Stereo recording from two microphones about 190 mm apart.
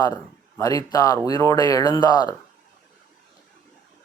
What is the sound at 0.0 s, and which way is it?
Speech, 20° left (ahead or behind).